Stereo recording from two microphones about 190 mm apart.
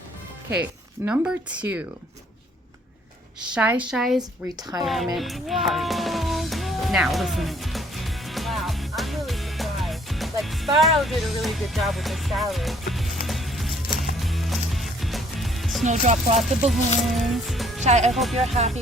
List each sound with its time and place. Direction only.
0.6 s speech: 10° right (ahead or behind)
3.5 s speech: 5° right (ahead or behind)
3.9 s music: centre (ahead or behind)
4.7 s speech: 15° right (ahead or behind)
5.1 s music: centre (ahead or behind)
15.8 s music: 40° right (ahead or behind)
16.4 s music: centre (ahead or behind)
17.7 s speech: 35° right (ahead or behind)
18.1 s music: centre (ahead or behind)
18.3 s music: 35° right (ahead or behind)